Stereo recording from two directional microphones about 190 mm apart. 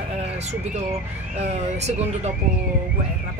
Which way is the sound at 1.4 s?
35° right (ahead or behind).